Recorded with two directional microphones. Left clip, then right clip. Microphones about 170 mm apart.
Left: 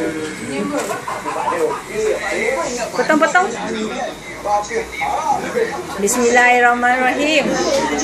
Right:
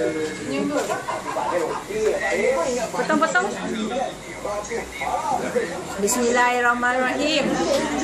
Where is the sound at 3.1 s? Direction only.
30° left (ahead or behind).